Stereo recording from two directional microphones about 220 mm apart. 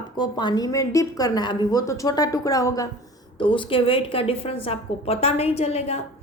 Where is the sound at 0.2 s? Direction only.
20° left (ahead or behind).